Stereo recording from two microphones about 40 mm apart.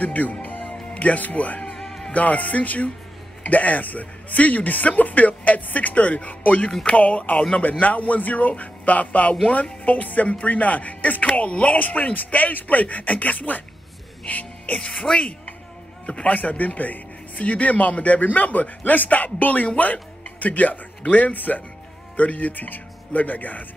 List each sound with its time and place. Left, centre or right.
0.0 s music: left
0.9 s a man's voice: left
1.7 s music: centre
2.1 s a man's voice: left